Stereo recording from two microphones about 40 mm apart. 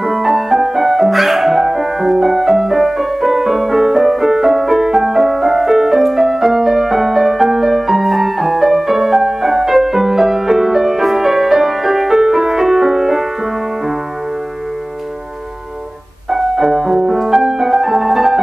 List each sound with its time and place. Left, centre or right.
0.0 s music: centre
16.3 s music: centre